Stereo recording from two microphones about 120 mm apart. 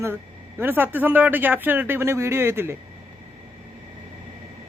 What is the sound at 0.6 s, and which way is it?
Speech, 15° right (ahead or behind).